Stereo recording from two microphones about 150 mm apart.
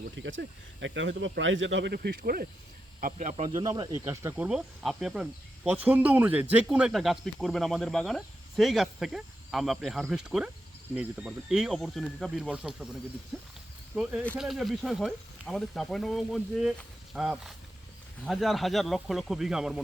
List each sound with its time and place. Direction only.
1.9 s speech: 90° right
3.0 s speech: 55° right (ahead or behind)
3.5 s speech: 30° right (ahead or behind)
4.4 s speech: 5° right (ahead or behind)
13.9 s speech: 10° right (ahead or behind)